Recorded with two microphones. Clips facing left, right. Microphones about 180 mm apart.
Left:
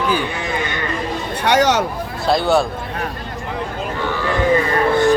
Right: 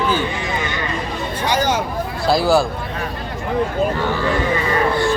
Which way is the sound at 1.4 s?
75° left (ahead or behind).